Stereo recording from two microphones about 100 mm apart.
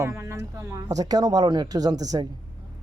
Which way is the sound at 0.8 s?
40° right (ahead or behind).